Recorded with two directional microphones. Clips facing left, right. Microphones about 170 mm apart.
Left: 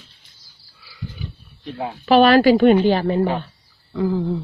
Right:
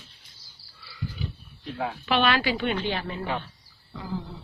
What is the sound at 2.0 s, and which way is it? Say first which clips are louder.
Speech: left 12 dB; 40° left (ahead or behind).